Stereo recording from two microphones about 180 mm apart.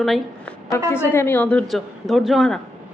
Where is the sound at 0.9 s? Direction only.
15° left (ahead or behind).